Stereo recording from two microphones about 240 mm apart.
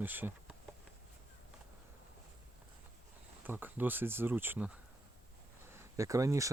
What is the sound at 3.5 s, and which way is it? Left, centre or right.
Speech, centre.